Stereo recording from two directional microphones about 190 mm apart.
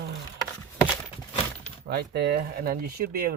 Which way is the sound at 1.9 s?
60° right (ahead or behind).